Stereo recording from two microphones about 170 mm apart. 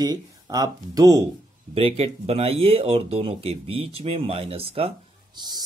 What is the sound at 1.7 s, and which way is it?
Speech, 35° right (ahead or behind).